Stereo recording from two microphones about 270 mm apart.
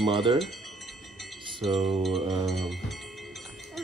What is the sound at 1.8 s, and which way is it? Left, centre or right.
Music, centre.